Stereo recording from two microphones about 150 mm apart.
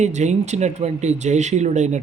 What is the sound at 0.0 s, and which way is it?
Speech, 50° right (ahead or behind).